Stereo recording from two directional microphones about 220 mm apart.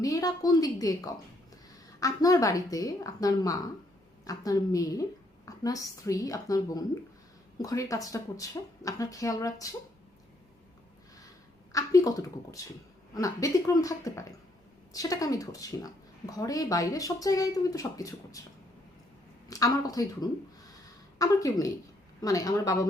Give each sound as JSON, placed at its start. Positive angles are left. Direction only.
{"t": 0.0, "sound": "a woman's voice", "side_deg": 15}
{"t": 11.7, "sound": "a woman's voice", "side_deg": 15}
{"t": 19.5, "sound": "a woman's voice", "side_deg": 15}
{"t": 21.2, "sound": "a woman's voice", "side_deg": 15}